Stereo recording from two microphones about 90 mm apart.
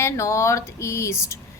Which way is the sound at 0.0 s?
30° left (ahead or behind).